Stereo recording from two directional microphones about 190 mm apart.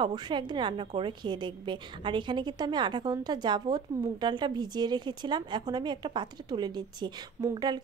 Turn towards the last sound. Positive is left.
turn(degrees=-20)  # may be behind; listen again after turning